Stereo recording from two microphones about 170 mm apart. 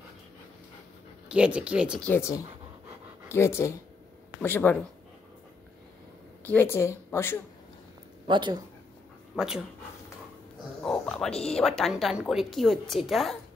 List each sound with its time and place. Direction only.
1.3 s speech: 5° right (ahead or behind)
2.0 s a woman's voice: 10° left (ahead or behind)
6.4 s a woman's voice: 10° left (ahead or behind)
8.3 s speech: 30° right (ahead or behind)
9.3 s speech: 5° right (ahead or behind)
10.8 s speech: 5° left (ahead or behind)